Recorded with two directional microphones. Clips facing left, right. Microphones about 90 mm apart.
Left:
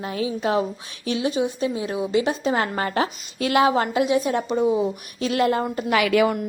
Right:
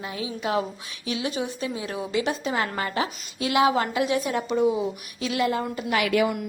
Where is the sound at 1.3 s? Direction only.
20° left (ahead or behind); by 3.7 s 45° left (ahead or behind).